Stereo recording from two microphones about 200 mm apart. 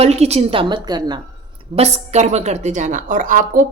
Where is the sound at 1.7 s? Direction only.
35° right (ahead or behind).